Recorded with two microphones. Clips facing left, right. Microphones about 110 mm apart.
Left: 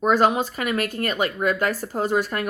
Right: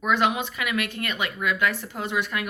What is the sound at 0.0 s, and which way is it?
A woman's voice, 40° left (ahead or behind).